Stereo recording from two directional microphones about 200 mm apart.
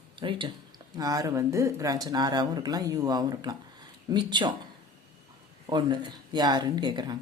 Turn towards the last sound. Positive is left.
turn(degrees=-20)  # may be behind; listen again after turning